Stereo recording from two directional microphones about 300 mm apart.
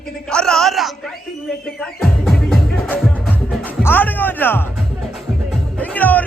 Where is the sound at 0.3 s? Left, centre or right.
Centre.